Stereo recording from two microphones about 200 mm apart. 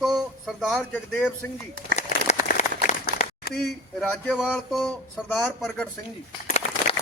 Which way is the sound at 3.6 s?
Centre (ahead or behind).